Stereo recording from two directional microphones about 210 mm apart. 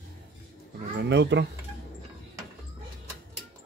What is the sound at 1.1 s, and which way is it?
Speech, 55° right (ahead or behind).